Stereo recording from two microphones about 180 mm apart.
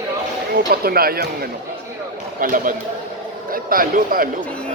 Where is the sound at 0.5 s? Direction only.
55° right (ahead or behind).